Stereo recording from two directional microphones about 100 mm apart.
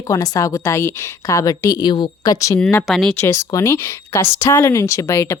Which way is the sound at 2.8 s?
5° left (ahead or behind).